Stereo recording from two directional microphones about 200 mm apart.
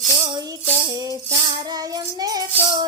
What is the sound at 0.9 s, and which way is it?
Music, 20° right (ahead or behind).